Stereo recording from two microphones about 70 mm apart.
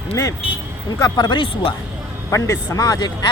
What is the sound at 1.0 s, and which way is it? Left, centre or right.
Speech, left.